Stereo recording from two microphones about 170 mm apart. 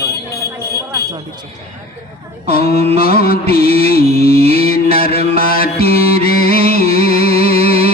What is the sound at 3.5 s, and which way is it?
Mantra, 60° left (ahead or behind).